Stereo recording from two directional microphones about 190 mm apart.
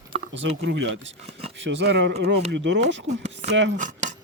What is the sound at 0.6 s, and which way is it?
Speech, 75° right (ahead or behind).